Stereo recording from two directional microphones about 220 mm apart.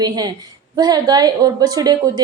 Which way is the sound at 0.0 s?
15° right (ahead or behind).